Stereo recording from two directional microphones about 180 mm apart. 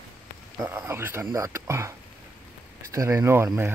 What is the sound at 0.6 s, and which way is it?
Speech, 10° right (ahead or behind).